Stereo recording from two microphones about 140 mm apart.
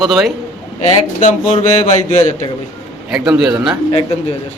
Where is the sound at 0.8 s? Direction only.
55° left (ahead or behind).